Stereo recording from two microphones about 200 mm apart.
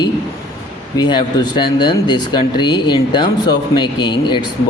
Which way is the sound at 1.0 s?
25° left (ahead or behind).